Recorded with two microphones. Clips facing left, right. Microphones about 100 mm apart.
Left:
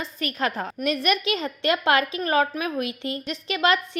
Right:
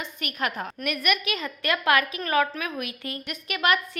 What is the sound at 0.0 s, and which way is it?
A woman's voice, 35° left (ahead or behind).